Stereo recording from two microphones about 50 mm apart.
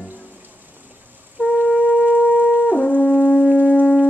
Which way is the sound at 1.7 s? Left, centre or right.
Left.